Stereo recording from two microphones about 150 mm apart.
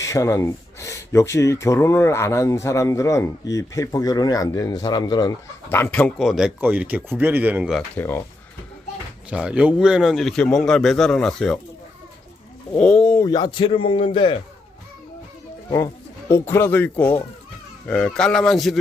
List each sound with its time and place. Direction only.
0.0 s speech: 20° left (ahead or behind)
5.6 s speech: 15° left (ahead or behind)
6.1 s speech: 5° right (ahead or behind)
7.9 s speech: 15° left (ahead or behind)
9.3 s a man's voice: 5° right (ahead or behind)
12.7 s speech: 10° left (ahead or behind)
13.1 s speech: 25° left (ahead or behind)
16.3 s a man's voice: 15° left (ahead or behind)